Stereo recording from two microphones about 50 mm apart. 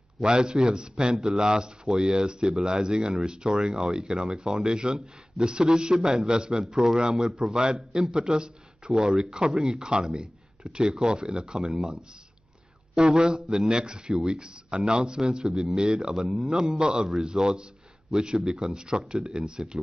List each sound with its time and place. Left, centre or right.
0.2 s speech: centre
12.9 s speech: centre